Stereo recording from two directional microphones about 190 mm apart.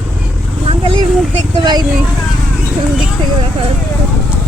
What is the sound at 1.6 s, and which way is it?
Speech, 20° right (ahead or behind).